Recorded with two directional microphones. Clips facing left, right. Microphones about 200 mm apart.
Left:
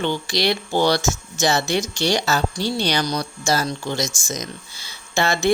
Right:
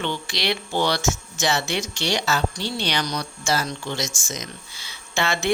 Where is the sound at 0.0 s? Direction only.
40° left (ahead or behind).